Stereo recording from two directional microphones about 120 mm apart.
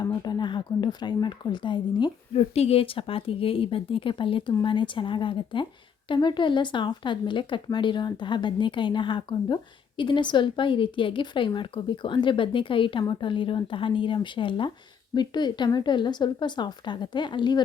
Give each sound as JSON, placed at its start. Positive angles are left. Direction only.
{"t": 0.0, "sound": "a woman's voice", "side_deg": 35}
{"t": 2.3, "sound": "a woman's voice", "side_deg": 55}